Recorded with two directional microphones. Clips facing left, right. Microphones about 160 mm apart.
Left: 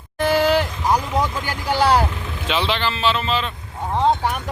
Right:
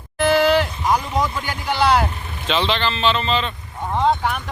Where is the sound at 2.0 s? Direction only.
90° left.